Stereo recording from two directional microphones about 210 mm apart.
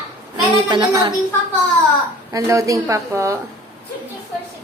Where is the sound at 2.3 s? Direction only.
15° right (ahead or behind).